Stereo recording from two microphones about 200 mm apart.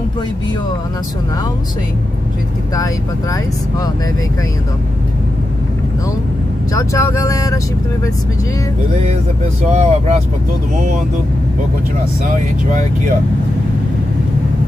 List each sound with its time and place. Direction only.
6.7 s speech: 15° left (ahead or behind)
9.7 s speech: 35° right (ahead or behind)